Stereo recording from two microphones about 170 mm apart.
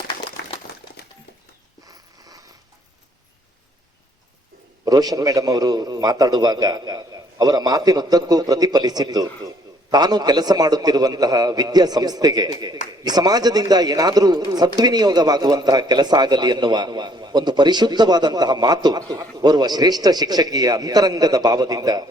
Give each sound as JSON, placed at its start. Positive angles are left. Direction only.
{"t": 1.9, "sound": "mechanisms", "side_deg": -20}
{"t": 4.9, "sound": "a man's voice", "side_deg": -20}